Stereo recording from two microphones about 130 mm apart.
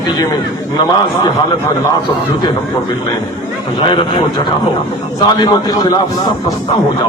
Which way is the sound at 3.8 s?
40° left (ahead or behind).